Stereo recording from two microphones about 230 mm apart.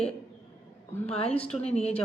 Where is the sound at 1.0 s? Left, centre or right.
Left.